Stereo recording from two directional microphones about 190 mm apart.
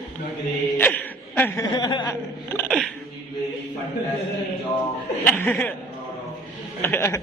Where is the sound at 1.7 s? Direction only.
25° left (ahead or behind).